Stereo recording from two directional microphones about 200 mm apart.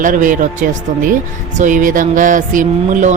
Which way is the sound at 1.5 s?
40° right (ahead or behind).